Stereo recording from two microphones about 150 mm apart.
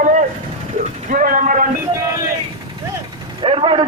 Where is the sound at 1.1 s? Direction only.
60° right (ahead or behind).